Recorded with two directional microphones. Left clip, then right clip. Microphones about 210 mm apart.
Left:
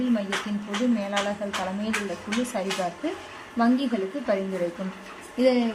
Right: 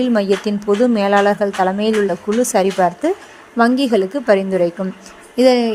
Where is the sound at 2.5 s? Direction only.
45° right (ahead or behind).